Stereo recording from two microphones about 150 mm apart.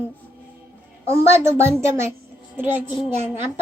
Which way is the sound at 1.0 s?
15° right (ahead or behind).